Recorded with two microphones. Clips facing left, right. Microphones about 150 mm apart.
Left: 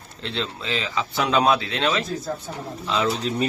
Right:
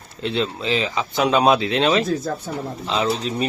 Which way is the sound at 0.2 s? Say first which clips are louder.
Right 6 dB; 15° right (ahead or behind).